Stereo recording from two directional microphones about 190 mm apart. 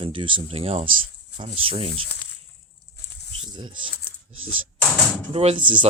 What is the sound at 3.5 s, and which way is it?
Speech, 25° right (ahead or behind).